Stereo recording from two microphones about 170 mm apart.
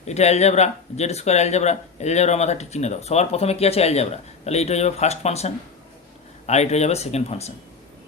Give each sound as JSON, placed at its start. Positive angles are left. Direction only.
{"t": 0.0, "sound": "speech", "side_deg": 40}